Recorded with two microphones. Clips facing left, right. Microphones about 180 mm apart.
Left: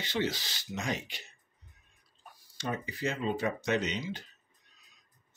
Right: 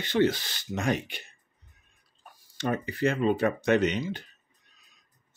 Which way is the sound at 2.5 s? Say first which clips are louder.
Right 6 dB; 60° right (ahead or behind).